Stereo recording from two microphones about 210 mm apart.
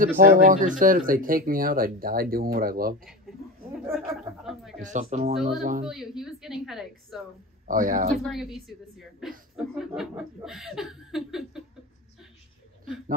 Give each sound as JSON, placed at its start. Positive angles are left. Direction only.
{"t": 0.2, "sound": "speech", "side_deg": -40}
{"t": 3.7, "sound": "speech", "side_deg": -5}
{"t": 4.1, "sound": "a sound", "side_deg": 0}
{"t": 4.7, "sound": "speech", "side_deg": -35}
{"t": 5.9, "sound": "speech", "side_deg": 0}
{"t": 7.6, "sound": "speech", "side_deg": -40}
{"t": 8.2, "sound": "speech", "side_deg": 0}
{"t": 9.6, "sound": "speech", "side_deg": 0}